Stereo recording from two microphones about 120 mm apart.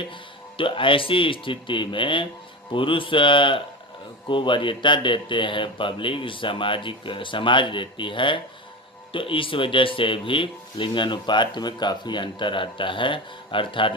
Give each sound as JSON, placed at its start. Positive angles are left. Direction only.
{"t": 0.5, "sound": "speech", "side_deg": 45}